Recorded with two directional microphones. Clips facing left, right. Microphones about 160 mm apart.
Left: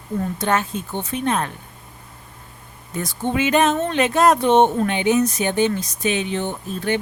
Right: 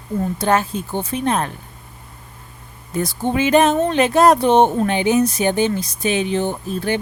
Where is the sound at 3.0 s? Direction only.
35° right (ahead or behind).